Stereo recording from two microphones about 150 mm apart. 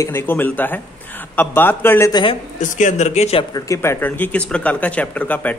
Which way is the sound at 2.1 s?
35° left (ahead or behind).